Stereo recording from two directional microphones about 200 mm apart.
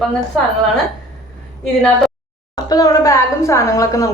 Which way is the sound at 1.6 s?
5° left (ahead or behind).